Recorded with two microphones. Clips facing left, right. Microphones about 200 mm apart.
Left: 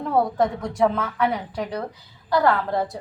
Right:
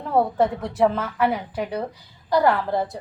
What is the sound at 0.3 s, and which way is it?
A woman's voice, 5° right (ahead or behind).